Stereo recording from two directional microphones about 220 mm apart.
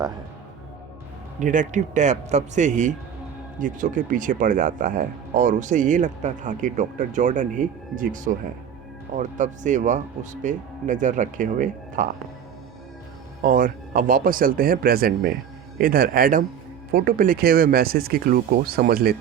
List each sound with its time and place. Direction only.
1.4 s speech: 35° right (ahead or behind)
13.4 s speech: 40° right (ahead or behind)